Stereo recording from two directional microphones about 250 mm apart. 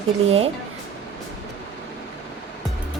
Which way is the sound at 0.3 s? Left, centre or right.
Right.